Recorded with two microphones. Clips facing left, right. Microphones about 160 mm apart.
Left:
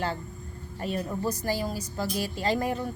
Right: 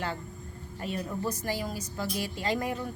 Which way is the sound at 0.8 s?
40° left (ahead or behind).